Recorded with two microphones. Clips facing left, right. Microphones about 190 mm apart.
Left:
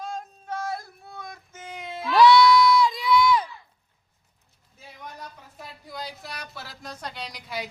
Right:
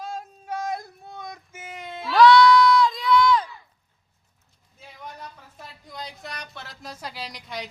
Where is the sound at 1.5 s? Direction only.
5° right (ahead or behind).